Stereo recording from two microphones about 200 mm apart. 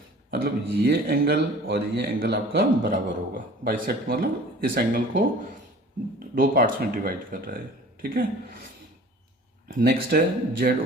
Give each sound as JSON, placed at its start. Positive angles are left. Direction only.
{"t": 0.3, "sound": "a man's voice", "side_deg": -50}
{"t": 6.3, "sound": "a man's voice", "side_deg": -45}
{"t": 9.6, "sound": "a man's voice", "side_deg": -45}